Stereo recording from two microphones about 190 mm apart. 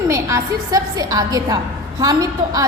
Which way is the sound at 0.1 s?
15° right (ahead or behind).